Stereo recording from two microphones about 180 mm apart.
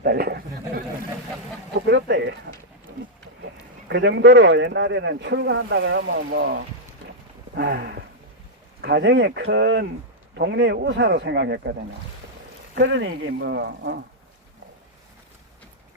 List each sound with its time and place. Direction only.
0.0 s a sound: 55° right (ahead or behind)
1.9 s a sound: 75° right (ahead or behind)
3.8 s speech: 75° right (ahead or behind)
7.5 s horse: 65° right (ahead or behind)
8.8 s speech: 75° right (ahead or behind)
12.7 s speech: 90° right; by 14.0 s 70° right (ahead or behind)